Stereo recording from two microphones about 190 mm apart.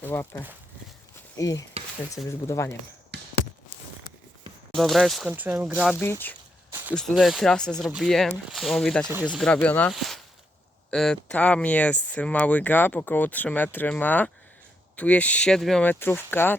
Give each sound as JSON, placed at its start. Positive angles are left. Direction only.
{"t": 0.0, "sound": "speech", "side_deg": 10}
{"t": 3.1, "sound": "a sound", "side_deg": -60}
{"t": 4.7, "sound": "speech", "side_deg": 0}
{"t": 5.9, "sound": "speech", "side_deg": 10}